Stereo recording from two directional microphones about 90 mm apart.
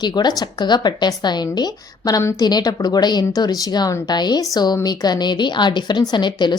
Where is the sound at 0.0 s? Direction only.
50° left (ahead or behind).